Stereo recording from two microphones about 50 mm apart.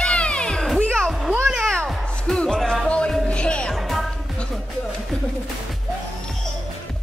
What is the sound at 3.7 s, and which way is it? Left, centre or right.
Music, centre.